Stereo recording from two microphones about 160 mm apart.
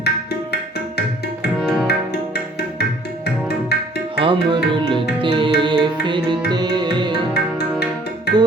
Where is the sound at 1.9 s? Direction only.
90° left.